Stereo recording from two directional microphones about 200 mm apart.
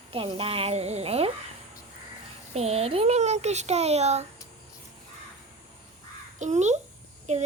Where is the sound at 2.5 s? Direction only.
30° right (ahead or behind).